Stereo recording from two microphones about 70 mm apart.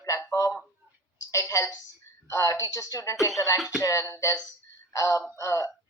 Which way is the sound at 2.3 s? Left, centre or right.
Left.